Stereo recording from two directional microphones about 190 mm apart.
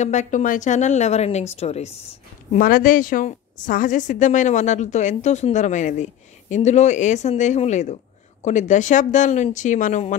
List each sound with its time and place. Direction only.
0.0 s a woman's voice: 40° left (ahead or behind)
2.5 s a woman's voice: 50° left (ahead or behind)